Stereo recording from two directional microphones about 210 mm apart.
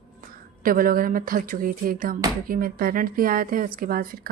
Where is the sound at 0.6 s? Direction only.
40° right (ahead or behind).